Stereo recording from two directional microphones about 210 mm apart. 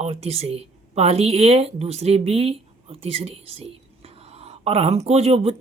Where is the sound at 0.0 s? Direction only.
30° right (ahead or behind).